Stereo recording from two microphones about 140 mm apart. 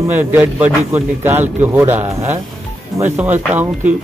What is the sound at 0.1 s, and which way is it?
Speech, 15° right (ahead or behind).